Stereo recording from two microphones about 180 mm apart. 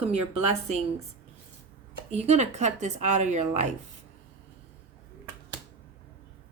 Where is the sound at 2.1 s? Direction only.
40° right (ahead or behind).